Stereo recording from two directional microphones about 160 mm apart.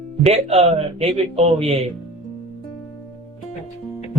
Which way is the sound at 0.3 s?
40° right (ahead or behind).